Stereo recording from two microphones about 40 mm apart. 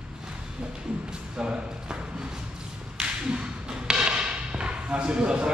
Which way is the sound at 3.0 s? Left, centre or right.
Right.